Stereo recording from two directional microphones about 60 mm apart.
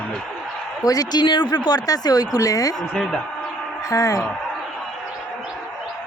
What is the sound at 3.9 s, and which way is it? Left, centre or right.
Speech, left.